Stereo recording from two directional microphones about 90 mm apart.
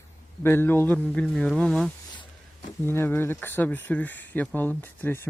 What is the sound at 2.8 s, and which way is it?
Speech, 25° left (ahead or behind).